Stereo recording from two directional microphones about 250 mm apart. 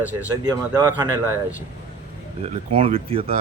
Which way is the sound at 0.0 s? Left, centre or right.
Centre.